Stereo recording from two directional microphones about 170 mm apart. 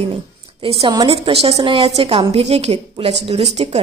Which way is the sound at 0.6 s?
30° right (ahead or behind).